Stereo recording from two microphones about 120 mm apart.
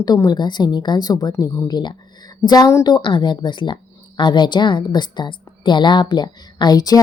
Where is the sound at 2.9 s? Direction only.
40° left (ahead or behind).